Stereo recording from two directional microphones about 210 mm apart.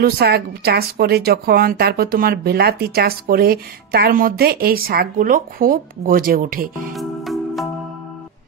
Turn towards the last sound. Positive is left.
turn(degrees=0)  # may be behind; listen again after turning